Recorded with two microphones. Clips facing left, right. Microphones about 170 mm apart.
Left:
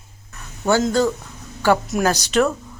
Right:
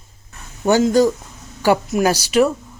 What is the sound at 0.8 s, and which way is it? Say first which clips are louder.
Speech: right 4 dB; 10° right (ahead or behind).